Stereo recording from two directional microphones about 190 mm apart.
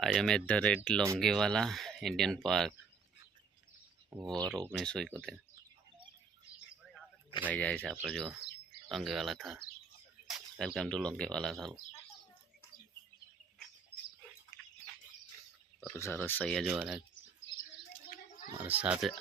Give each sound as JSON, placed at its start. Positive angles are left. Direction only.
{"t": 0.0, "sound": "speech", "side_deg": 0}
{"t": 4.2, "sound": "speech", "side_deg": -20}
{"t": 4.4, "sound": "speech", "side_deg": 5}
{"t": 6.8, "sound": "a sound", "side_deg": 0}
{"t": 7.5, "sound": "speech", "side_deg": 5}
{"t": 14.5, "sound": "a sound", "side_deg": -20}
{"t": 15.9, "sound": "speech", "side_deg": 15}
{"t": 18.5, "sound": "speech", "side_deg": -10}